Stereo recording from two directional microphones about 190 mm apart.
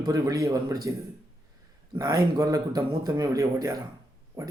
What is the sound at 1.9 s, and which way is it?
Speech, 20° right (ahead or behind).